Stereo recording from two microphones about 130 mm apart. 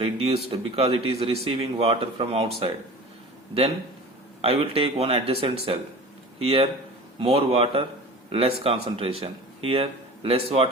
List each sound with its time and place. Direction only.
0.0 s speech: 50° right (ahead or behind)
4.4 s speech: 45° right (ahead or behind)